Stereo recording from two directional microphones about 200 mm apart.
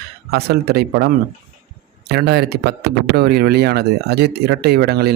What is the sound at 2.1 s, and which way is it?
Speech, 55° right (ahead or behind).